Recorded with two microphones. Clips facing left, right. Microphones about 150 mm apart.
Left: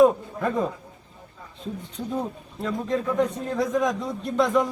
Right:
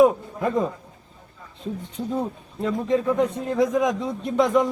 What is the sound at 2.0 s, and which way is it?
A man's voice, 25° right (ahead or behind).